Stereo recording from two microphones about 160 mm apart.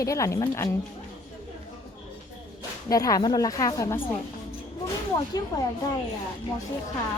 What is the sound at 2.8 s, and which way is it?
A woman's voice, 20° left (ahead or behind).